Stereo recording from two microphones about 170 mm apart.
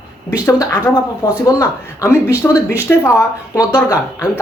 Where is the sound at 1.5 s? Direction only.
20° left (ahead or behind).